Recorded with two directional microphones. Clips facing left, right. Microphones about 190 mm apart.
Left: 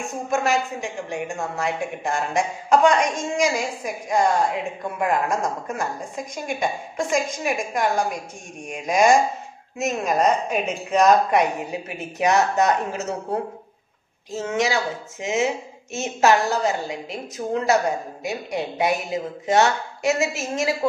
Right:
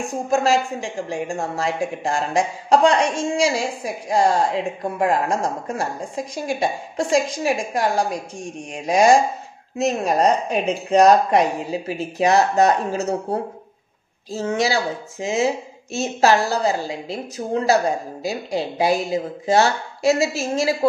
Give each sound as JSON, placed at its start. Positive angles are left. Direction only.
{"t": 0.1, "sound": "a woman's voice", "side_deg": -35}
{"t": 14.3, "sound": "a woman's voice", "side_deg": -35}